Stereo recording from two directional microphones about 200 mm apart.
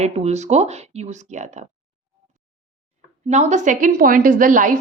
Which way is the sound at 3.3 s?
35° right (ahead or behind).